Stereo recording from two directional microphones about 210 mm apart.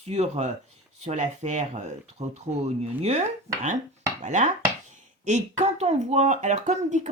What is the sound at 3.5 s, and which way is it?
Speech, 15° right (ahead or behind).